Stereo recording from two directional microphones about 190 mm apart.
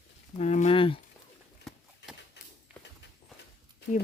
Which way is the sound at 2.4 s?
65° left (ahead or behind).